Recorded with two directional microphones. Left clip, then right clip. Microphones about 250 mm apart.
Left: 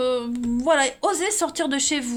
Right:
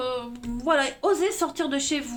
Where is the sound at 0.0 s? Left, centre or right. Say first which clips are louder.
Left 6 dB; left.